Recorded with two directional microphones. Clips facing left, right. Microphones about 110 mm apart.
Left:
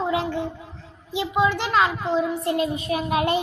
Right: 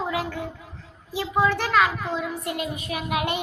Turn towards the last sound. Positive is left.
turn(degrees=30)  # may be behind; listen again after turning